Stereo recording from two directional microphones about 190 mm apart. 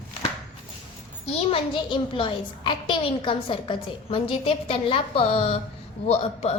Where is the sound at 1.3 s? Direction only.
30° left (ahead or behind).